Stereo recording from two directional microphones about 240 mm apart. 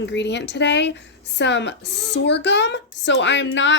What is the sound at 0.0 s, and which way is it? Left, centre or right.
Speech, left.